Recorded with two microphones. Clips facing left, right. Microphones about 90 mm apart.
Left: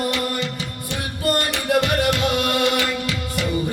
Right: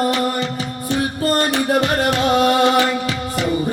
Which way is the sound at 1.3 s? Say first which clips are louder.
Right 2 dB; 30° right (ahead or behind).